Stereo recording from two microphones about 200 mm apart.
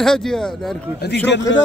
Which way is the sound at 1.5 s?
70° left (ahead or behind).